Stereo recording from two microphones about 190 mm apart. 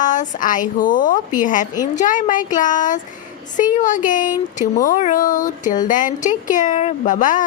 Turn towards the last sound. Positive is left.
turn(degrees=45)  # may be behind; listen again after turning